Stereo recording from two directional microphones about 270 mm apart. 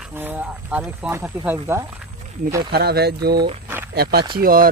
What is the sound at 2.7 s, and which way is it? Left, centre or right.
Speech, right.